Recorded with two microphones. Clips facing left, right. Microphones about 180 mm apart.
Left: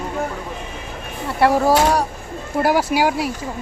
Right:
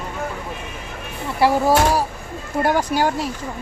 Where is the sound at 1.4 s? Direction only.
Centre (ahead or behind).